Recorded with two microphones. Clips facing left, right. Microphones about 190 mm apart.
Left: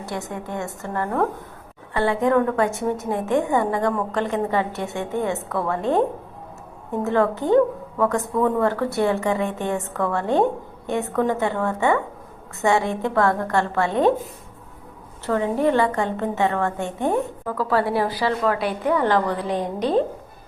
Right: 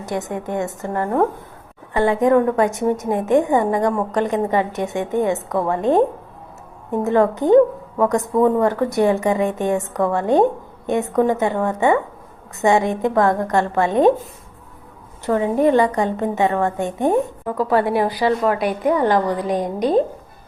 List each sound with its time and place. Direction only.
0.0 s a woman's voice: 20° right (ahead or behind)
15.3 s a woman's voice: 15° right (ahead or behind)